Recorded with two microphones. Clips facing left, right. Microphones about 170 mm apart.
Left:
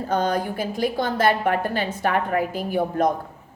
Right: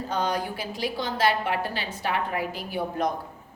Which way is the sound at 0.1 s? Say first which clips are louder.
Left 5 dB; 50° left (ahead or behind).